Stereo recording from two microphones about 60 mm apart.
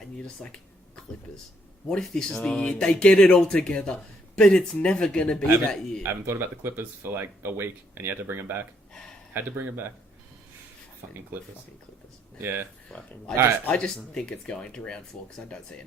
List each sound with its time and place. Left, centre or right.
0.2 s speech: centre
6.0 s speech: right
12.4 s speech: right
12.9 s speech: centre